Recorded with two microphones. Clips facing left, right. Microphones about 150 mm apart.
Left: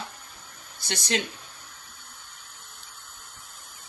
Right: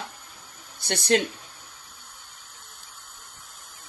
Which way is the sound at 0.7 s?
55° right (ahead or behind).